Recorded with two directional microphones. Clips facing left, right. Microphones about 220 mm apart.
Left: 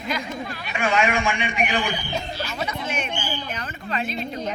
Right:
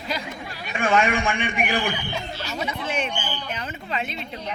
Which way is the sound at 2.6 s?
30° right (ahead or behind).